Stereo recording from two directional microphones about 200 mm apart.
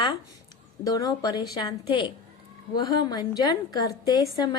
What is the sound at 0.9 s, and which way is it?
A woman's voice, 20° left (ahead or behind).